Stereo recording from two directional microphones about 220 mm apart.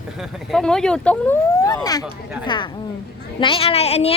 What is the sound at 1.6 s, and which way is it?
A woman's voice, 15° left (ahead or behind).